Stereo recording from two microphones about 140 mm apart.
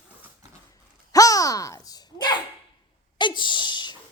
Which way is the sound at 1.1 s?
25° left (ahead or behind).